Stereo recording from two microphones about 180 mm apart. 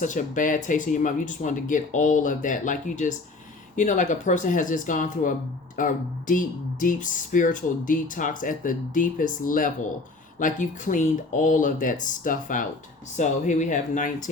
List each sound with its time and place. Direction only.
0.0 s speech: 45° left (ahead or behind)